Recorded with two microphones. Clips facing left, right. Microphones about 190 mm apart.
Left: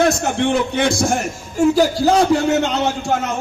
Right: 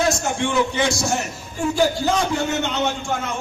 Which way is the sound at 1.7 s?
40° left (ahead or behind).